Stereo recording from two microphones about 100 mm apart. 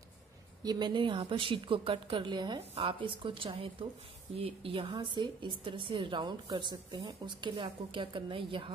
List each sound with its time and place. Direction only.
0.7 s a woman's voice: 45° right (ahead or behind)
2.7 s a woman's voice: 65° right (ahead or behind)
4.9 s a woman's voice: 50° right (ahead or behind)